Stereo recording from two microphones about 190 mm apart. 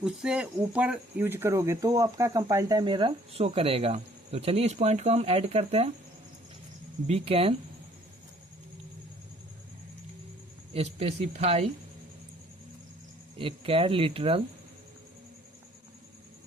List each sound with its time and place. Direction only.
0.0 s speech: 5° right (ahead or behind); by 5.9 s 35° right (ahead or behind)
7.1 s speech: 30° right (ahead or behind)
10.8 s speech: 35° right (ahead or behind)
13.4 s speech: 30° right (ahead or behind)